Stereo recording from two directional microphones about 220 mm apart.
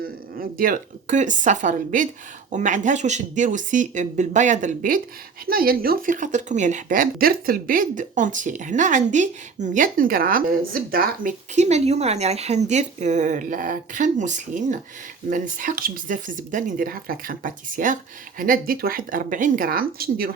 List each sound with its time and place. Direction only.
0.0 s speech: 40° right (ahead or behind)